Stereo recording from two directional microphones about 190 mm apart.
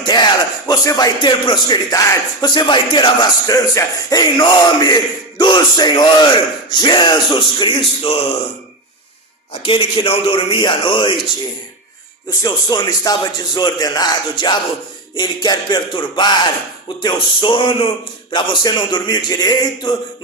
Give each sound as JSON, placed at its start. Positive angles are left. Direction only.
{"t": 0.7, "sound": "speech", "side_deg": 20}
{"t": 9.5, "sound": "speech", "side_deg": 25}
{"t": 12.4, "sound": "speech", "side_deg": 20}